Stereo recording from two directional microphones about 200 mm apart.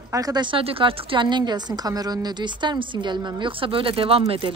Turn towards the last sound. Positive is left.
turn(degrees=-30)  # may be behind; listen again after turning